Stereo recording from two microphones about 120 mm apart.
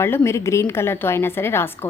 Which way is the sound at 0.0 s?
20° left (ahead or behind).